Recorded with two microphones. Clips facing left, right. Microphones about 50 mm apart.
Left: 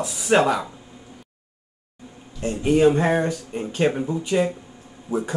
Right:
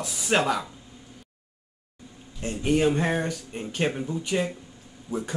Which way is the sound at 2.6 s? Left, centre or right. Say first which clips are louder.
Left 5 dB; centre.